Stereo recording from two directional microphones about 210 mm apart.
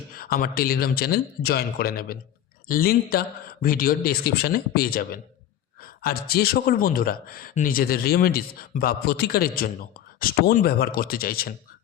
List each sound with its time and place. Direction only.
0.1 s speech: 45° left (ahead or behind)